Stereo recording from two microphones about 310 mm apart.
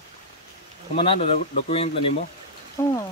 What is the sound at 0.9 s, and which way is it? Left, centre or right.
Speech, centre.